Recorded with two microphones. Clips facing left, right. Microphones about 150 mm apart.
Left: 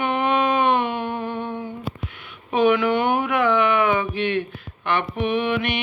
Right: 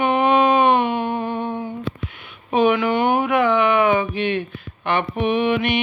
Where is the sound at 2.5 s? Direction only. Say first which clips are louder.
Right 1 dB; 10° right (ahead or behind).